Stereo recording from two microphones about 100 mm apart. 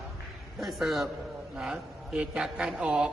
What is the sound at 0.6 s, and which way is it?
Speech, centre (ahead or behind).